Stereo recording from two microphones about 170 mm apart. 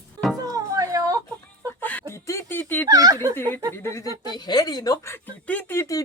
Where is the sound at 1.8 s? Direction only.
10° left (ahead or behind).